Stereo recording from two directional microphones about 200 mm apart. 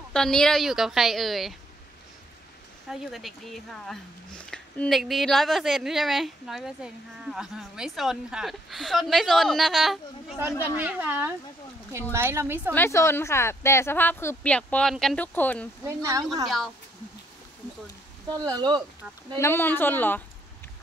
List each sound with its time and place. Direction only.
0.1 s a woman's voice: 5° left (ahead or behind)
2.9 s a woman's voice: centre (ahead or behind)
12.7 s a woman's voice: 10° left (ahead or behind)
15.8 s a woman's voice: 15° right (ahead or behind)
16.4 s a woman's voice: centre (ahead or behind)
18.4 s speech: 20° right (ahead or behind)
19.3 s a woman's voice: 10° left (ahead or behind)